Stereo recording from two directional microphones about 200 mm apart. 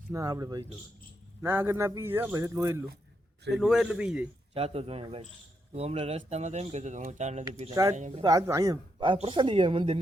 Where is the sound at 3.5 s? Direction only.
Centre (ahead or behind).